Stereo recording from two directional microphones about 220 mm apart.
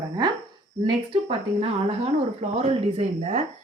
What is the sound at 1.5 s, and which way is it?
Speech, 25° right (ahead or behind).